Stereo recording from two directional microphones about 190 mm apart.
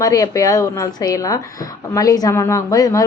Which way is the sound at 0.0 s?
20° left (ahead or behind).